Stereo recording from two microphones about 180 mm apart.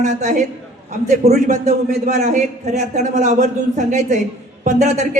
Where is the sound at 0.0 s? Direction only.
40° right (ahead or behind).